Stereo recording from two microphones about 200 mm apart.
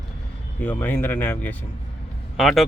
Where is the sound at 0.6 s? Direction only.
10° left (ahead or behind).